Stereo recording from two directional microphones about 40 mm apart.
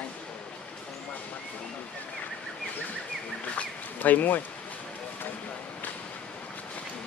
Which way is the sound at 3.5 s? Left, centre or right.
Left.